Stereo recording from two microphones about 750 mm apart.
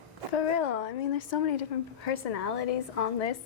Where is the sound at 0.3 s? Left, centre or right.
Left.